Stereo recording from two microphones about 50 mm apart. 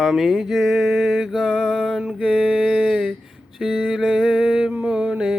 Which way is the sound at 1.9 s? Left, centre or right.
Centre.